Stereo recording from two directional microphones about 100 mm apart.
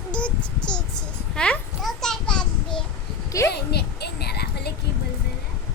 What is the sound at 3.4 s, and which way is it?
Speech, 30° left (ahead or behind).